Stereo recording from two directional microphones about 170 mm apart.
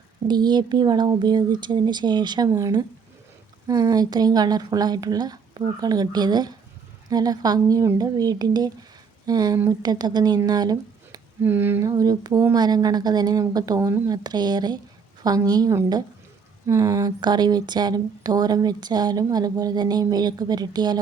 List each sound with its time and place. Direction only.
0.3 s speech: 25° right (ahead or behind)